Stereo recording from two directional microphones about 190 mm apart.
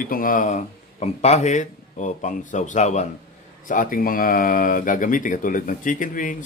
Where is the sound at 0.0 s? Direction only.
45° left (ahead or behind).